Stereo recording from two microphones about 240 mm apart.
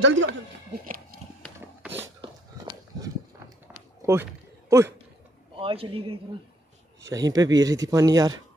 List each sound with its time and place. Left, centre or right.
0.0 s speech: right
2.2 s a sound: centre
5.6 s a man's voice: right